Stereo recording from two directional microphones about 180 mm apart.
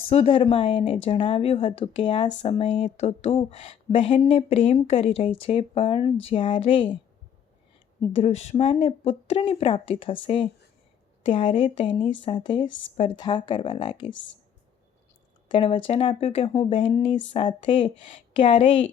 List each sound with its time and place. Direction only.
0.1 s speech: 35° left (ahead or behind)
8.1 s speech: 35° left (ahead or behind)
14.1 s speech: 90° left
15.4 s speech: 30° left (ahead or behind)